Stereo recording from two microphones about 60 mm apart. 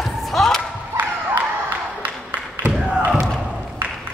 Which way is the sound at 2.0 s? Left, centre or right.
Right.